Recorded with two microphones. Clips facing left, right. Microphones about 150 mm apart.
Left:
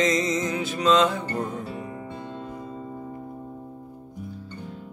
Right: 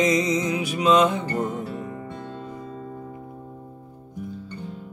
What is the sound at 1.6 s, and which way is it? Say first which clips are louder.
Music: right 2 dB; centre (ahead or behind).